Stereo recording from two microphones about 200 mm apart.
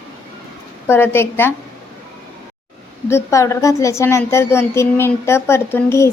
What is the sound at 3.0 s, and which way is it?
A woman's voice, 15° left (ahead or behind).